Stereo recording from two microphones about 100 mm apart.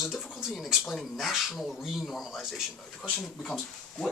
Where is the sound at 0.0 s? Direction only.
5° right (ahead or behind).